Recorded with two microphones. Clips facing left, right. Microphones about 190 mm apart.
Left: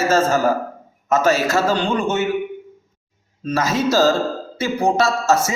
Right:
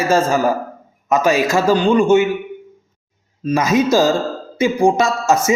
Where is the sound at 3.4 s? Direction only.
15° right (ahead or behind).